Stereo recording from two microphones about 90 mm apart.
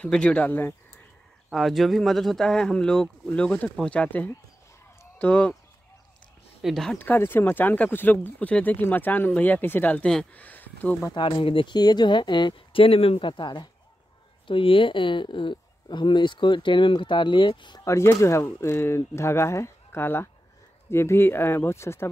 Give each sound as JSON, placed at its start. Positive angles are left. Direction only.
{"t": 0.0, "sound": "speech", "side_deg": 10}
{"t": 0.5, "sound": "speech", "side_deg": 25}
{"t": 1.5, "sound": "speech", "side_deg": 0}
{"t": 6.6, "sound": "speech", "side_deg": 5}
{"t": 7.0, "sound": "speech", "side_deg": 20}
{"t": 11.1, "sound": "speech", "side_deg": 60}
{"t": 11.7, "sound": "speech", "side_deg": 50}
{"t": 14.5, "sound": "speech", "side_deg": 80}
{"t": 17.7, "sound": "speech", "side_deg": 30}